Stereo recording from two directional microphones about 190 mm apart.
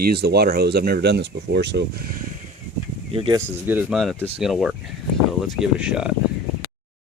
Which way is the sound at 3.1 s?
30° right (ahead or behind).